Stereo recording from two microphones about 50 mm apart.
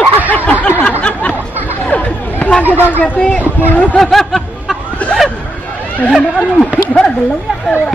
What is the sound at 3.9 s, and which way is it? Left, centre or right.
Speech, centre.